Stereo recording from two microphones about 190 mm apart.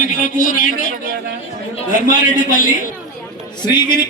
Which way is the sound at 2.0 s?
45° left (ahead or behind).